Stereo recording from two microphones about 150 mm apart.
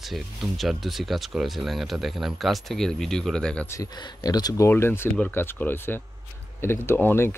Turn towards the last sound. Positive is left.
turn(degrees=15)  # may be behind; listen again after turning